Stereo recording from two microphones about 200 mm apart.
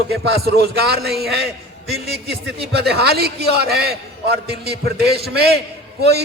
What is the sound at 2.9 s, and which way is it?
A man's voice, 55° right (ahead or behind).